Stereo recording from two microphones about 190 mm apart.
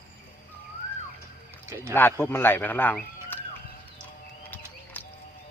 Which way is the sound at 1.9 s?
10° left (ahead or behind).